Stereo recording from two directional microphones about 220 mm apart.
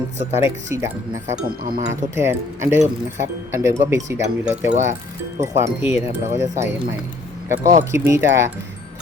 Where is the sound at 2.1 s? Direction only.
10° right (ahead or behind).